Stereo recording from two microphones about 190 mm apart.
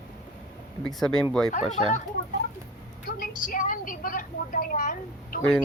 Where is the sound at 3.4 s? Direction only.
45° left (ahead or behind).